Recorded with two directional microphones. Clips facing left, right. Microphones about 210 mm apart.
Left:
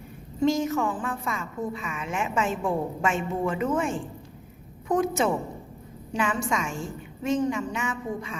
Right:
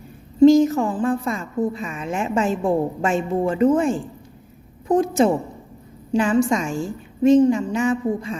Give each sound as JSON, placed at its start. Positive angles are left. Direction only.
{"t": 0.4, "sound": "a woman's voice", "side_deg": -35}